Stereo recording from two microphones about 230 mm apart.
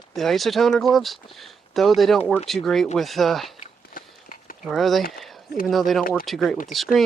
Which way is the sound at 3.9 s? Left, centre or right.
Left.